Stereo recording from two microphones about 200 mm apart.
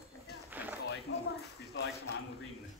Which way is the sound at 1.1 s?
90° left.